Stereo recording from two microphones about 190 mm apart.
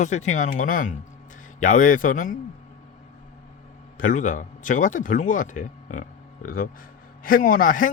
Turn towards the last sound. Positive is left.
turn(degrees=45)  # may be behind; listen again after turning